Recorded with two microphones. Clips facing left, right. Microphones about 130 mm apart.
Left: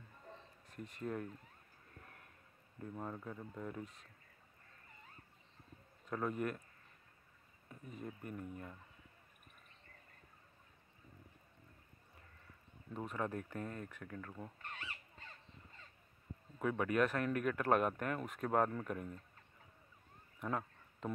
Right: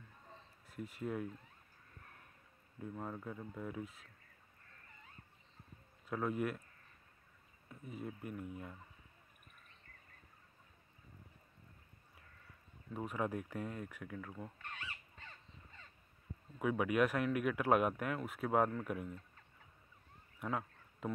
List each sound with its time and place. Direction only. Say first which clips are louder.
0.7 s speech: right 2 dB; 5° right (ahead or behind)
2.8 s speech: right 1 dB; centre (ahead or behind)
6.0 s speech: right 1 dB; 5° right (ahead or behind)
7.9 s speech: right 2 dB; 5° right (ahead or behind)
12.9 s speech: right 2 dB; 10° right (ahead or behind)
16.5 s speech: right 1 dB; 10° right (ahead or behind)
20.3 s a sound: even; 5° right (ahead or behind)